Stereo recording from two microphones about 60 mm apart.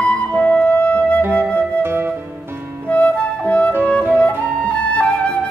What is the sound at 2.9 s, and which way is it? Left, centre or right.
Music, left.